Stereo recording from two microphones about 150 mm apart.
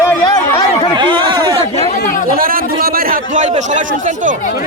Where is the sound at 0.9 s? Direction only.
30° right (ahead or behind).